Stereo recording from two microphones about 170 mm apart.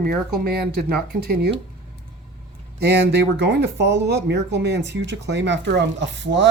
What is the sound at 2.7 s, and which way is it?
Speech, 75° right (ahead or behind).